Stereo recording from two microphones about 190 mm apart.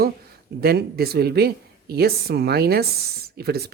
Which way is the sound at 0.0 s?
55° right (ahead or behind).